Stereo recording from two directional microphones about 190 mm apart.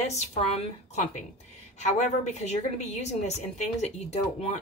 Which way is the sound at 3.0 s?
35° left (ahead or behind).